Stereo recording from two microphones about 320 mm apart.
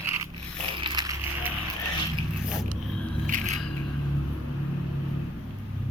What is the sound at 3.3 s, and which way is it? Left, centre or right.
Scissors, right.